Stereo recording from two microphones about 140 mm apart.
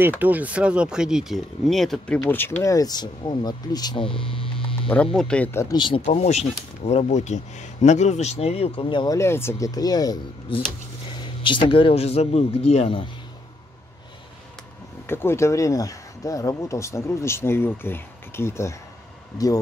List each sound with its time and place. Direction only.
0.2 s speech: 10° right (ahead or behind)
2.1 s speech: 15° left (ahead or behind); by 4.5 s 40° left (ahead or behind)
4.8 s speech: 10° left (ahead or behind)
5.8 s speech: 35° left (ahead or behind)
6.0 s a man's voice: 50° left (ahead or behind)
15.0 s speech: 15° left (ahead or behind)